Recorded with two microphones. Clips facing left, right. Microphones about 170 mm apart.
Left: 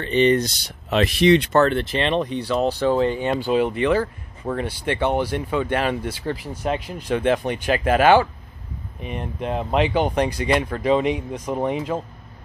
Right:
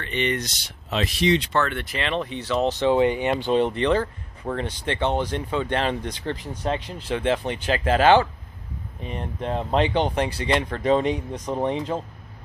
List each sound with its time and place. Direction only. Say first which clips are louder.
0.0 s speech: left 8 dB; 35° left (ahead or behind)
0.8 s speech: left 6 dB; 60° left (ahead or behind)
1.5 s speech: left 7 dB; 35° left (ahead or behind)
2.3 s speech: left 2 dB; 10° left (ahead or behind)
2.9 s speech: right 3 dB; 15° right (ahead or behind)
3.3 s speech: left 1 dB; 5° left (ahead or behind)